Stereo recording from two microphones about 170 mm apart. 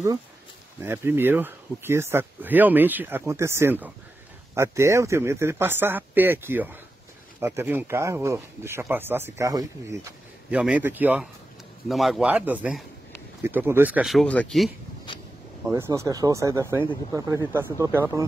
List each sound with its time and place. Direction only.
0.8 s speech: 15° right (ahead or behind)
10.5 s speech: 10° right (ahead or behind)
15.7 s speech: 15° right (ahead or behind)